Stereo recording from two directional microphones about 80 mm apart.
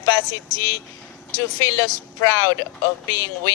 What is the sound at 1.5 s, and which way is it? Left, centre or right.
Speech, left.